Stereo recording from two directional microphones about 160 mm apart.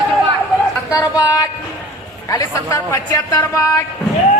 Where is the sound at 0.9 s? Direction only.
25° left (ahead or behind).